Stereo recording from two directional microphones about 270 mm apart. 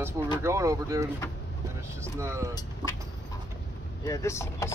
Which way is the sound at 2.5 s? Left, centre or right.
Centre.